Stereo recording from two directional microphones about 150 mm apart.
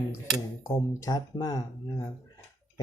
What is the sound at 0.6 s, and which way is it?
Speech, 25° left (ahead or behind).